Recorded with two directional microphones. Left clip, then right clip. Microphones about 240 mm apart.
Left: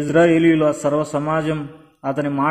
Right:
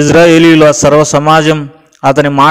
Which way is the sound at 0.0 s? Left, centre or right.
Right.